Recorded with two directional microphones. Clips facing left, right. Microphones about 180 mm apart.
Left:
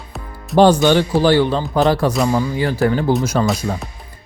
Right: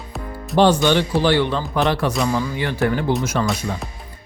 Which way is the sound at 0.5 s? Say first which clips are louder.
Left 4 dB; 40° left (ahead or behind).